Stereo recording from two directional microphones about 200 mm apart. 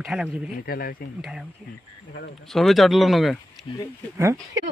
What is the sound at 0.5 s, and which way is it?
Speech, 45° left (ahead or behind).